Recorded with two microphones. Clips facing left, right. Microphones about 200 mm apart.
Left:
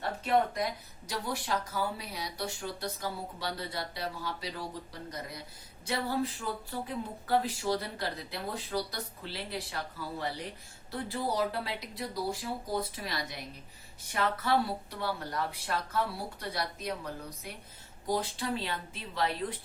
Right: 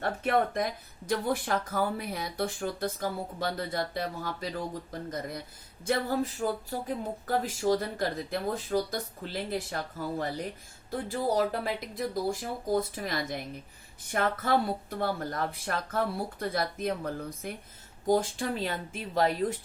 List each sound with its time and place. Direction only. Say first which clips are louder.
0.0 s speech: right 1 dB; 50° right (ahead or behind)